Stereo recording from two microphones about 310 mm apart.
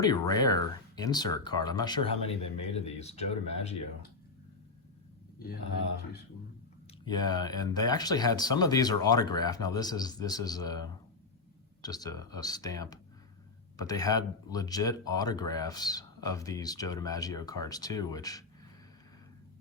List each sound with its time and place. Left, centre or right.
0.0 s speech: centre
7.0 s speech: centre